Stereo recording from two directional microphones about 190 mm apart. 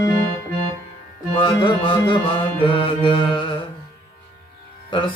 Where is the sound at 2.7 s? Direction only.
25° left (ahead or behind).